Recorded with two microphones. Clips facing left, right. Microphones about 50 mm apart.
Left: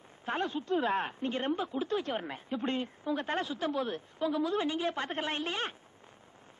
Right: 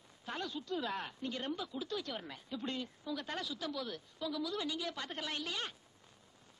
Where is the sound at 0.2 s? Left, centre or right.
Left.